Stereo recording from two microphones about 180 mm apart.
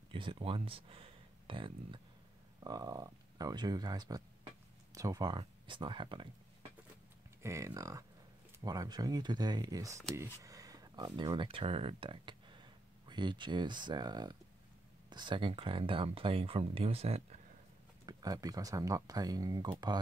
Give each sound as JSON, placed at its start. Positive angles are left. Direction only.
{"t": 0.1, "sound": "speech", "side_deg": -30}
{"t": 7.4, "sound": "speech", "side_deg": -15}
{"t": 18.0, "sound": "speech", "side_deg": -20}